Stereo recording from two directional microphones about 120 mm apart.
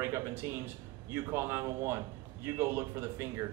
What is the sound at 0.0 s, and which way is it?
A man's voice, 25° right (ahead or behind).